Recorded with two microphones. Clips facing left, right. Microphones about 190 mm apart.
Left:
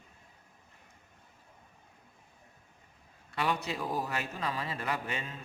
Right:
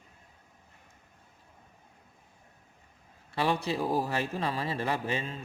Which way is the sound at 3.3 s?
30° right (ahead or behind).